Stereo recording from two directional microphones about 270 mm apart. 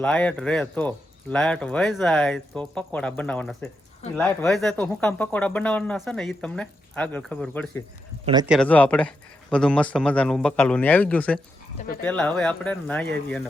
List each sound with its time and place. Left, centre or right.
0.0 s speech: centre
8.2 s speech: centre
8.4 s speech: centre